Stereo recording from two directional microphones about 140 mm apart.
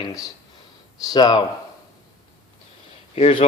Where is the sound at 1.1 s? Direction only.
30° left (ahead or behind).